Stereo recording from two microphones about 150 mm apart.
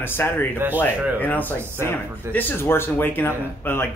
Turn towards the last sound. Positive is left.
turn(degrees=15)  # may be behind; listen again after turning